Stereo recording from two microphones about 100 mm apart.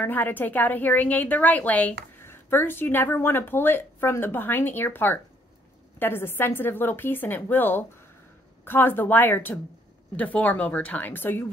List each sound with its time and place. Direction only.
0.0 s a woman's voice: 20° left (ahead or behind)